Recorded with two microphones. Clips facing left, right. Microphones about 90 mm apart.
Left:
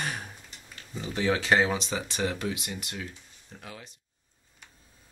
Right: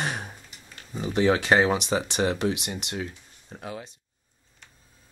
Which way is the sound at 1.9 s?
60° right (ahead or behind).